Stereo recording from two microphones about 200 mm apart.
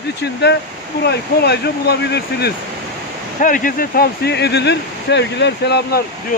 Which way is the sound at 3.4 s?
45° left (ahead or behind).